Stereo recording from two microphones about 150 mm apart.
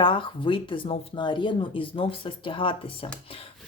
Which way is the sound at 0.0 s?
35° left (ahead or behind).